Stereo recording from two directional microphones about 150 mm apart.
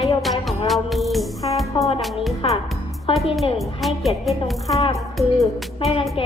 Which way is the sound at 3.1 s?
35° left (ahead or behind).